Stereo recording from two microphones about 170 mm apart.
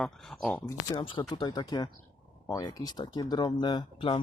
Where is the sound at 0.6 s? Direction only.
20° left (ahead or behind).